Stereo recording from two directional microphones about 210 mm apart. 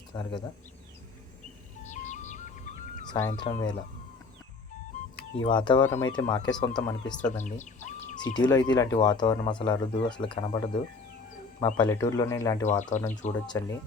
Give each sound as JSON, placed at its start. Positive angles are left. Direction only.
{"t": 0.1, "sound": "speech", "side_deg": 20}
{"t": 1.8, "sound": "music", "side_deg": 35}
{"t": 3.1, "sound": "speech", "side_deg": 20}
{"t": 5.4, "sound": "speech", "side_deg": 20}
{"t": 7.2, "sound": "bird", "side_deg": 35}
{"t": 8.2, "sound": "speech", "side_deg": 20}
{"t": 11.6, "sound": "speech", "side_deg": 20}
{"t": 12.6, "sound": "speech", "side_deg": 35}